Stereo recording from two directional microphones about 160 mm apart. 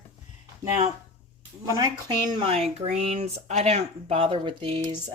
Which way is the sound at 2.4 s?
40° right (ahead or behind).